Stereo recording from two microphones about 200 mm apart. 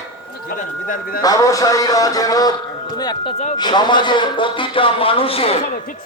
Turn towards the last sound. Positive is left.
turn(degrees=30)  # may be behind; listen again after turning